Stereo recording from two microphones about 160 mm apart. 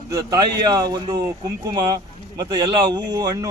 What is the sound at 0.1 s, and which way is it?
A man's voice, 20° right (ahead or behind).